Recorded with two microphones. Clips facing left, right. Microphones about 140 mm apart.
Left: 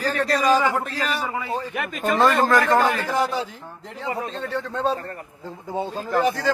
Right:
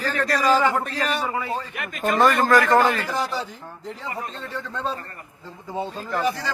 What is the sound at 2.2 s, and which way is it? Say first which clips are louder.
Speech: right 1 dB; 25° left (ahead or behind).